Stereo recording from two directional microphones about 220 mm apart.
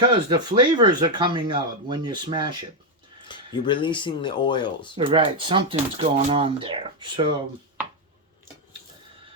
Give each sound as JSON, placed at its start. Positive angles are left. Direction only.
{"t": 0.1, "sound": "speech", "side_deg": -20}
{"t": 3.2, "sound": "speech", "side_deg": 20}
{"t": 4.9, "sound": "speech", "side_deg": -20}